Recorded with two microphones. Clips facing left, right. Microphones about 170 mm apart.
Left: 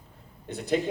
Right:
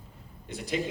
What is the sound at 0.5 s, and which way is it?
Speech, 55° left (ahead or behind).